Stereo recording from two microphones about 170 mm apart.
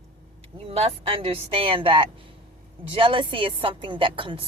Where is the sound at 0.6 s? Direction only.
35° right (ahead or behind).